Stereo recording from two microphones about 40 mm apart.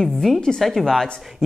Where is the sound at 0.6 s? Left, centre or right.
Centre.